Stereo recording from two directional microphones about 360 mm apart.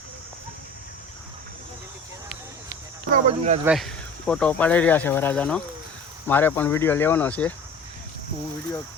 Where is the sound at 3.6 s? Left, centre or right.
Centre.